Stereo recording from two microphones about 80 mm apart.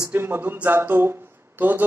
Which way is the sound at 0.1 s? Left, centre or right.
Right.